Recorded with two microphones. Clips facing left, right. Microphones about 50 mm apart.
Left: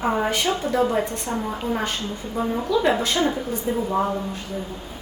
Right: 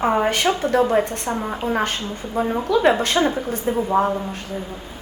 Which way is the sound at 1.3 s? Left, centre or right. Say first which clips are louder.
Right 2 dB; right.